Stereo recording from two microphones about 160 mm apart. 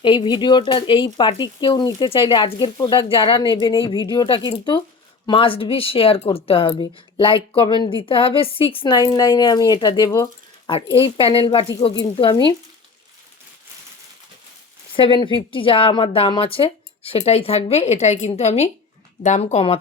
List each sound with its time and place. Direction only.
0.0 s speech: 30° left (ahead or behind)
10.7 s speech: 35° left (ahead or behind)
14.9 s speech: 30° left (ahead or behind)